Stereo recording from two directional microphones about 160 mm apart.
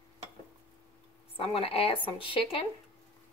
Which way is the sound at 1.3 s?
35° left (ahead or behind).